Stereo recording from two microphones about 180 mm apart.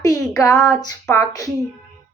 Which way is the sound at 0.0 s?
15° left (ahead or behind).